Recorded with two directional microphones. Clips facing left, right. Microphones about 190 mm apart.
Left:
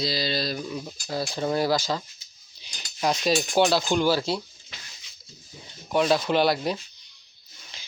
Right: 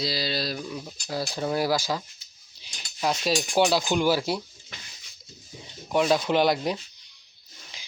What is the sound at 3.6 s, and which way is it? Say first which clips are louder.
Speech: even; 10° right (ahead or behind).